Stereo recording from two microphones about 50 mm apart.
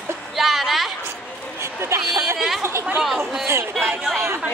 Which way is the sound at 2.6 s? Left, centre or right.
Right.